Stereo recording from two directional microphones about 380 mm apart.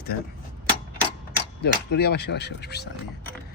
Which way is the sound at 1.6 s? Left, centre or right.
Left.